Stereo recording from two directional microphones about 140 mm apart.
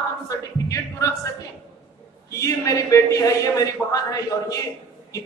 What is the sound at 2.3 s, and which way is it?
A man's voice, 25° left (ahead or behind).